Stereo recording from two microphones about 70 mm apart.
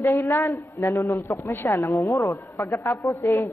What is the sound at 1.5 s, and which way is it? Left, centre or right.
Speech, left.